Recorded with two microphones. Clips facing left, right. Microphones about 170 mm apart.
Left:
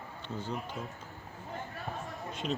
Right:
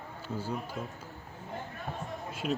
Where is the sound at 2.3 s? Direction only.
Centre (ahead or behind).